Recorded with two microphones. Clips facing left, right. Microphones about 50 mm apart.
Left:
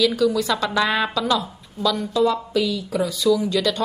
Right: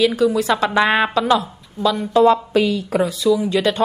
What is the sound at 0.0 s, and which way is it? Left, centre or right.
A woman's voice, right.